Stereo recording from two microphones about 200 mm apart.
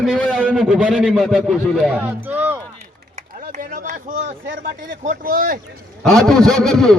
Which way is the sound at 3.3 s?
45° right (ahead or behind).